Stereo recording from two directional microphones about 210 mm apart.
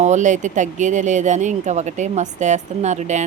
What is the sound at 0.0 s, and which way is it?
A woman's voice, 35° right (ahead or behind).